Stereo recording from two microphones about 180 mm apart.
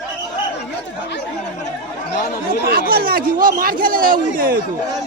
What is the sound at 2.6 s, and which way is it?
Speech, 55° right (ahead or behind).